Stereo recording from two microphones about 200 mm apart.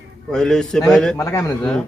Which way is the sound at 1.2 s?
15° left (ahead or behind).